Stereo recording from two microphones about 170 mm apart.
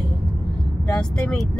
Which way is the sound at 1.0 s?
5° left (ahead or behind).